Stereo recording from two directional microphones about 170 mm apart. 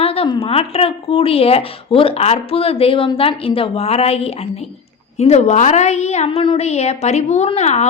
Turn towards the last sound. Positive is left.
turn(degrees=40)  # may be behind; listen again after turning